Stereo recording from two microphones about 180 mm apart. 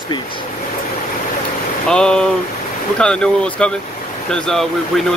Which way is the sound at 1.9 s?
5° left (ahead or behind).